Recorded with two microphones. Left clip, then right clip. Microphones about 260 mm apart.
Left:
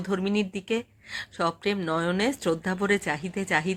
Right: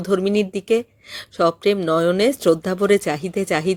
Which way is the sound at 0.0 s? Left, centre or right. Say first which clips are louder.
Right 9 dB; centre.